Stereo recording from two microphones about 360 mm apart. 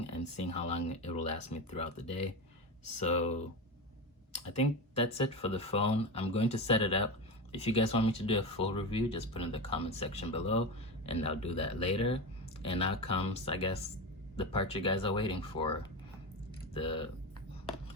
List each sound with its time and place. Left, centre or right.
0.0 s speech: centre
16.7 s speech: centre